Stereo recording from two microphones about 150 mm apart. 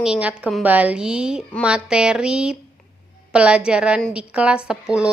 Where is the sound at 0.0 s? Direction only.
5° right (ahead or behind).